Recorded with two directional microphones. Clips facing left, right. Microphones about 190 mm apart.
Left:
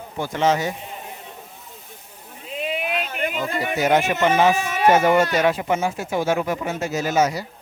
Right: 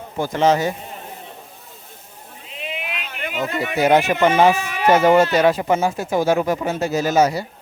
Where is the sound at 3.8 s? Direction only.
40° right (ahead or behind).